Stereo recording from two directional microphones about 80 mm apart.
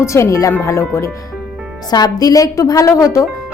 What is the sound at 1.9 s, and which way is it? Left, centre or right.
A woman's voice, left.